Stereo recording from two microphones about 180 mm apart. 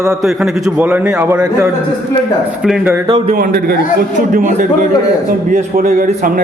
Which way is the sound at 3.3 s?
55° right (ahead or behind).